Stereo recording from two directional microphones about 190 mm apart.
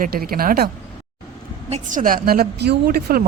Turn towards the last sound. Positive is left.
turn(degrees=-50)  # may be behind; listen again after turning